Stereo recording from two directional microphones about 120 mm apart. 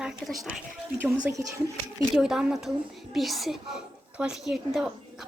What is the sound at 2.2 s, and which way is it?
A woman's voice, 5° right (ahead or behind).